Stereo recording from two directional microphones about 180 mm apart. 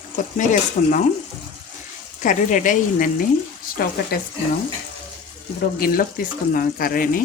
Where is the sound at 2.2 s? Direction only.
45° left (ahead or behind).